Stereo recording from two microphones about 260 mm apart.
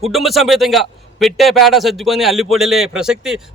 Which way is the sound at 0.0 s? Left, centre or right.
Centre.